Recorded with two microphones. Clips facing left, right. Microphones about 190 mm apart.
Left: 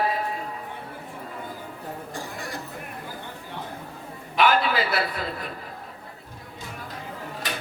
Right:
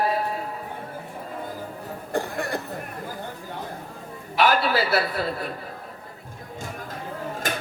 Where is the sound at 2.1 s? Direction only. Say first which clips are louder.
Right 13 dB; 60° right (ahead or behind).